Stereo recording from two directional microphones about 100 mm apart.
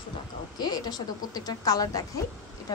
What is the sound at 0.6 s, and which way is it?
A woman's voice, 45° left (ahead or behind).